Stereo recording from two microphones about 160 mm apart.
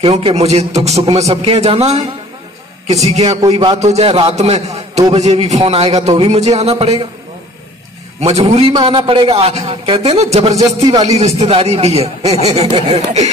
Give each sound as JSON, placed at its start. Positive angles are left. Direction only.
{"t": 0.0, "sound": "a man's voice", "side_deg": -35}
{"t": 3.3, "sound": "speech", "side_deg": -25}
{"t": 3.5, "sound": "a man's voice", "side_deg": -40}
{"t": 8.2, "sound": "a man's voice", "side_deg": -40}
{"t": 10.6, "sound": "speech", "side_deg": -25}
{"t": 11.1, "sound": "a man's voice", "side_deg": -40}